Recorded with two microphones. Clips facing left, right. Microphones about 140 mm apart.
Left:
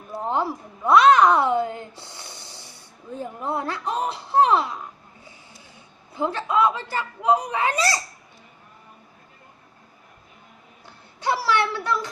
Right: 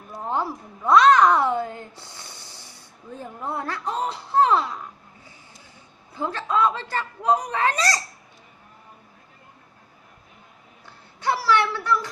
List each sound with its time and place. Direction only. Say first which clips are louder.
0.1 s a woman's voice: left 2 dB; 20° left (ahead or behind)
6.1 s speech: left 2 dB; 20° left (ahead or behind)
11.3 s a sound: right 1 dB; 15° left (ahead or behind)